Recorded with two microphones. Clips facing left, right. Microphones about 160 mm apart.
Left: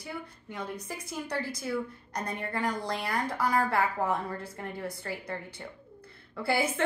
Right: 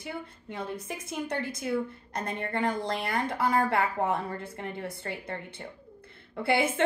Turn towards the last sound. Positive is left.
turn(degrees=-25)  # may be behind; listen again after turning